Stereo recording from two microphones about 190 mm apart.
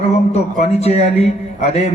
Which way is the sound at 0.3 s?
35° left (ahead or behind).